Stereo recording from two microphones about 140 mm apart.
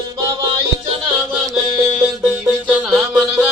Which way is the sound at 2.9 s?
5° right (ahead or behind).